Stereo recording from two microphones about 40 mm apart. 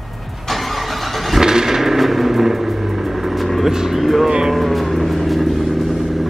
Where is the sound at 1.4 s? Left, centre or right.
Centre.